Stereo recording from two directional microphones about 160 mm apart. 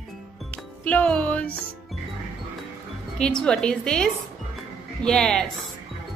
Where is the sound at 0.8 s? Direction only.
10° left (ahead or behind).